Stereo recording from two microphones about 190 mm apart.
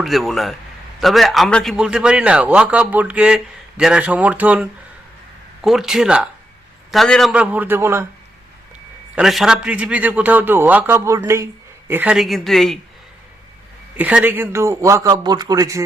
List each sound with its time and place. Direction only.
0.0 s a man's voice: centre (ahead or behind)
9.1 s a man's voice: centre (ahead or behind)
13.9 s a man's voice: 5° right (ahead or behind)